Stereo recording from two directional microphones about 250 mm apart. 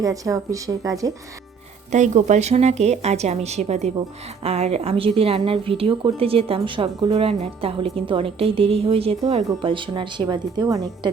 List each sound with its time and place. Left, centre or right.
0.0 s speech: centre
1.9 s speech: right